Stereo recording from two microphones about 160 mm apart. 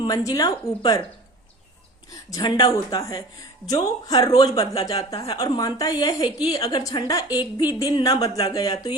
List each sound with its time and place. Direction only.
0.0 s a woman's voice: 25° left (ahead or behind)
2.3 s a woman's voice: 25° left (ahead or behind)